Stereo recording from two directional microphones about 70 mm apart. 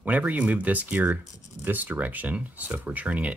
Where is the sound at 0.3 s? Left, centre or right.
Right.